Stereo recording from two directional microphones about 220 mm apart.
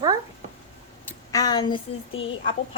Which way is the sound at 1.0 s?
15° left (ahead or behind).